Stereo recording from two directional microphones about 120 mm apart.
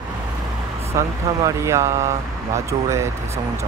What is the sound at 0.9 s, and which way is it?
Speech, 25° right (ahead or behind).